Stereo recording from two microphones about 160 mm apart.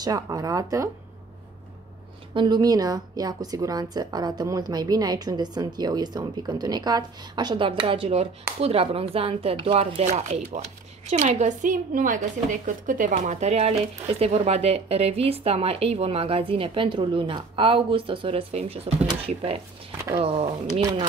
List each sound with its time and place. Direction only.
0.0 s a woman's voice: 25° right (ahead or behind)
2.3 s a woman's voice: 25° right (ahead or behind)
20.8 s a woman's voice: 25° right (ahead or behind)